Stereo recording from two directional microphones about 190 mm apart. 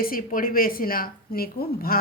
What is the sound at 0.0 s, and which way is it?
A woman's voice, 45° left (ahead or behind).